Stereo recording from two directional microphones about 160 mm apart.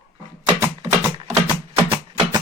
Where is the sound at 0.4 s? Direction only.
15° right (ahead or behind).